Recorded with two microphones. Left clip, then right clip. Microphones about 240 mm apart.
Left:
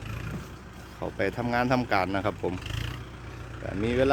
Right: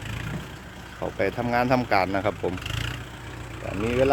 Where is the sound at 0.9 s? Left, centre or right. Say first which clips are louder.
Right 3 dB; centre.